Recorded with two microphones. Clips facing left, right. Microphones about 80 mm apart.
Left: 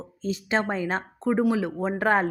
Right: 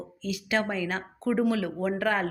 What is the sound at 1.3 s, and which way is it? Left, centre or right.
Speech, centre.